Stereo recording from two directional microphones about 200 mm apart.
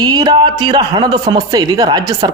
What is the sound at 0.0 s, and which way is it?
A man's voice, 20° right (ahead or behind).